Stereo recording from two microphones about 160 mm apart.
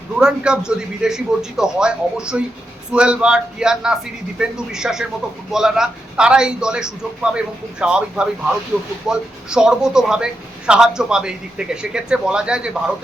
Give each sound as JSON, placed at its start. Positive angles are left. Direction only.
{"t": 0.2, "sound": "a man's voice", "side_deg": -5}